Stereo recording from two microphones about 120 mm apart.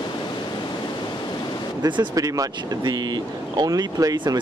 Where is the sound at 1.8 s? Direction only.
35° right (ahead or behind).